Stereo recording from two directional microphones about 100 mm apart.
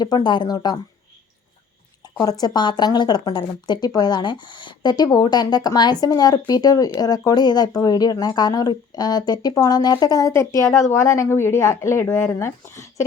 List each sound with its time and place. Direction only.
0.0 s speech: 50° left (ahead or behind)
2.2 s speech: 40° left (ahead or behind)